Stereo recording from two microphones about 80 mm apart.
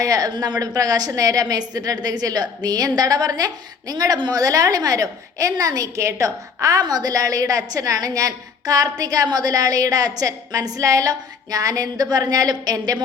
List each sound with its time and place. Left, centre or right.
0.0 s a woman's voice: right
0.3 s a woman's voice: right